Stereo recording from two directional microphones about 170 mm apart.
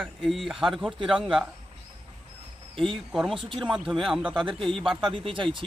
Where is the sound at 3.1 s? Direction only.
Centre (ahead or behind).